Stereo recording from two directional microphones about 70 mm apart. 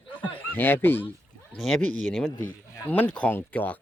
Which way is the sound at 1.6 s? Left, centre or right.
Centre.